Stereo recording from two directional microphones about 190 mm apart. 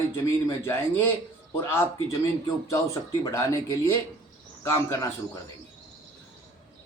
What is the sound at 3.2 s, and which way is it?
A man's voice, 15° left (ahead or behind).